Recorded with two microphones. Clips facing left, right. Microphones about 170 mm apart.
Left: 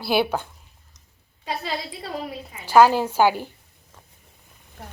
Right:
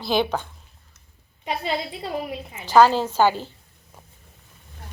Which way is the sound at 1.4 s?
20° right (ahead or behind).